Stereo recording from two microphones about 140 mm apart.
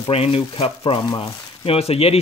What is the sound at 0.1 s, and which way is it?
Speech, 45° left (ahead or behind).